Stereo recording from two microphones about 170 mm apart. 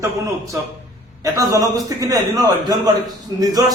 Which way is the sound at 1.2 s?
20° right (ahead or behind).